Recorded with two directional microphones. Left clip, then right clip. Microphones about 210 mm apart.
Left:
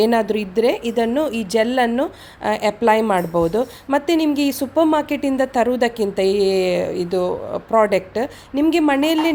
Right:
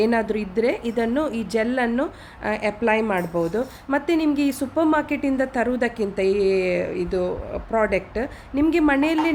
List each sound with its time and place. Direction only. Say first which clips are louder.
0.0 s a woman's voice: left 4 dB; 15° left (ahead or behind)